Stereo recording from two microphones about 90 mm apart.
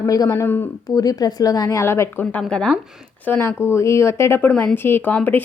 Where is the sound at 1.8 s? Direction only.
30° left (ahead or behind).